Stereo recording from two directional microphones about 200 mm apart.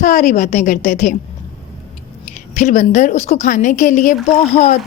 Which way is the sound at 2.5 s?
40° left (ahead or behind).